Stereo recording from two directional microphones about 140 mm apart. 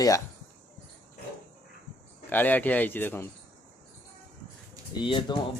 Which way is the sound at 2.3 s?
10° left (ahead or behind).